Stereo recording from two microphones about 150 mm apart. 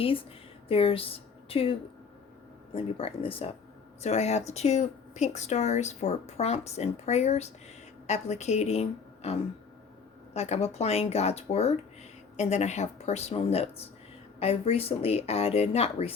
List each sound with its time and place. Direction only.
0.7 s speech: 40° left (ahead or behind)
2.7 s speech: 40° left (ahead or behind)
10.3 s speech: 45° left (ahead or behind)